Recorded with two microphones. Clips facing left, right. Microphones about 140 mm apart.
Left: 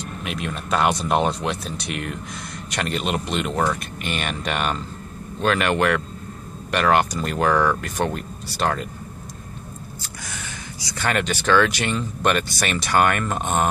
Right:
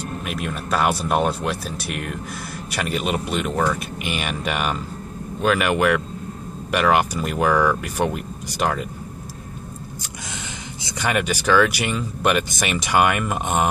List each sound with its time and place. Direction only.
0.2 s speech: 5° right (ahead or behind)
10.8 s speech: 20° right (ahead or behind)
11.1 s speech: 10° right (ahead or behind)